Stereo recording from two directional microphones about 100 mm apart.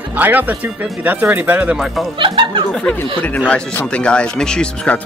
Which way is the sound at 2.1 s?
55° right (ahead or behind).